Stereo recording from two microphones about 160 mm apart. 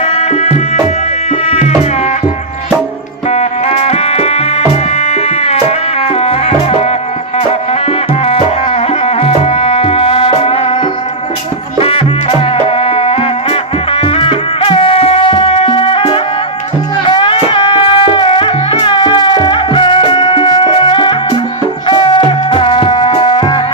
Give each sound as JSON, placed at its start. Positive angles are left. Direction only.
{"t": 0.0, "sound": "music", "side_deg": 40}
{"t": 3.2, "sound": "music", "side_deg": 40}